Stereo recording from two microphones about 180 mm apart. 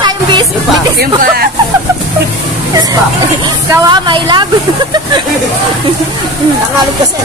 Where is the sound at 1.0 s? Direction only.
60° right (ahead or behind).